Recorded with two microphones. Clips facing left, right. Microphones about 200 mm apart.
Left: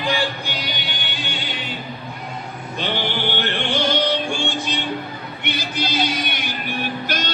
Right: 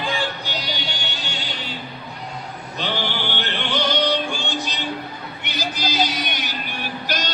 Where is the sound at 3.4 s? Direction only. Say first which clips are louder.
Left 1 dB; 50° left (ahead or behind).